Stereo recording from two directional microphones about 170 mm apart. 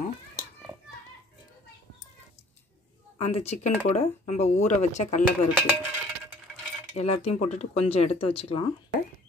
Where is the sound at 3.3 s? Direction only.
40° left (ahead or behind).